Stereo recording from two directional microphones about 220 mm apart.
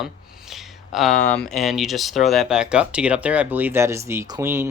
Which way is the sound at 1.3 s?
5° left (ahead or behind).